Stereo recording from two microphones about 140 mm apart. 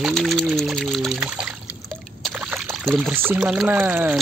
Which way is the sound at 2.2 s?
5° right (ahead or behind).